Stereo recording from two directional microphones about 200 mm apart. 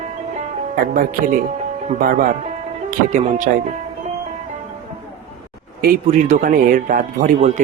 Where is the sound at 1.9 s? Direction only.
45° right (ahead or behind).